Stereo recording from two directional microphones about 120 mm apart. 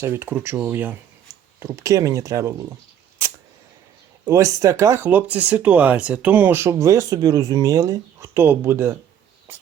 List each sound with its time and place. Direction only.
0.0 s speech: 20° right (ahead or behind)
1.5 s speech: 25° right (ahead or behind)
4.3 s speech: 25° right (ahead or behind)